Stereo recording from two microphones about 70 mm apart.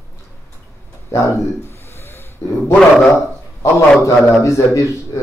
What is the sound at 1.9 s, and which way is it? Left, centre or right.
Snort, left.